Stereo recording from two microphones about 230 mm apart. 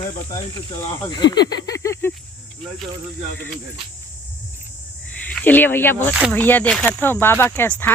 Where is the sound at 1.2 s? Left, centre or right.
Left.